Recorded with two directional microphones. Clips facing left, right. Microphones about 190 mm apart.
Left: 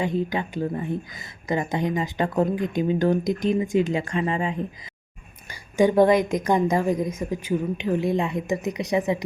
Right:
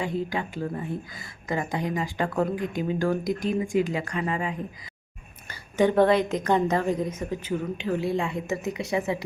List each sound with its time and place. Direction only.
0.0 s a woman's voice: 20° left (ahead or behind)
5.5 s a woman's voice: 10° left (ahead or behind)